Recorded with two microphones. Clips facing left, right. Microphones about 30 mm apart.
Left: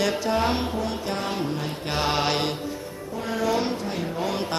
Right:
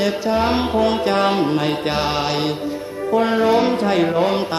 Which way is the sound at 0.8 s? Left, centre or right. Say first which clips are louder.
Right 11 dB; right.